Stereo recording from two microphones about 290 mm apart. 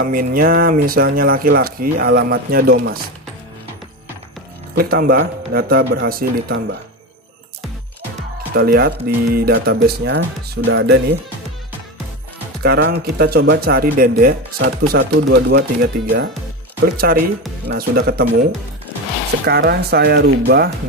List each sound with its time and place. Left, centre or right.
0.0 s speech: right
4.7 s speech: right
8.5 s speech: right
12.6 s speech: right
19.4 s speech: right